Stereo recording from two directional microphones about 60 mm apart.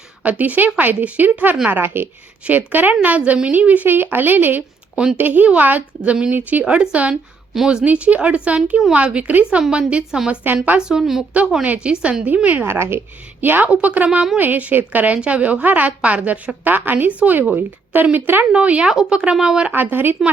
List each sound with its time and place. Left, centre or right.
0.2 s a woman's voice: right
7.5 s a woman's voice: centre
7.9 s a woman's voice: right
9.6 s a woman's voice: centre
10.4 s a woman's voice: right
10.8 s a woman's voice: centre
11.6 s a woman's voice: right
12.6 s a woman's voice: right
18.5 s a woman's voice: right
18.9 s a woman's voice: centre
19.7 s a woman's voice: right